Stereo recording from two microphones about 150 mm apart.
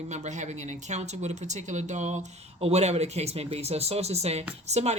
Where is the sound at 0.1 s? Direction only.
50° right (ahead or behind).